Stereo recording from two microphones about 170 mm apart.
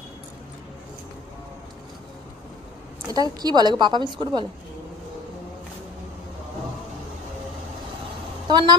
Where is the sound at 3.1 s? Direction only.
25° right (ahead or behind).